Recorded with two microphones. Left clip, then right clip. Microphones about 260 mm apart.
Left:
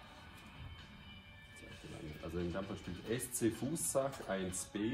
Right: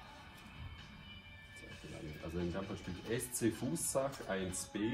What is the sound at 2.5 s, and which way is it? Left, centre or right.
Speech, centre.